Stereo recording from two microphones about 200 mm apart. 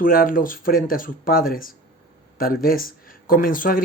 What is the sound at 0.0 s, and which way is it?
Speech, 45° left (ahead or behind).